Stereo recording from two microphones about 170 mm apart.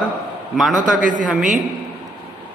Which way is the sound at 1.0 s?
50° right (ahead or behind).